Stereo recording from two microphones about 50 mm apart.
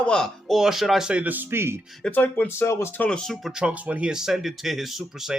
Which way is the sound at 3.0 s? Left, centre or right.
Centre.